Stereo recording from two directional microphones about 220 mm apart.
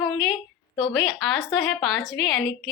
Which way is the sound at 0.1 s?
Centre (ahead or behind).